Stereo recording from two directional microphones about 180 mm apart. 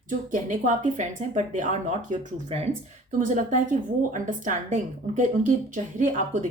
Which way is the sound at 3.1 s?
45° right (ahead or behind).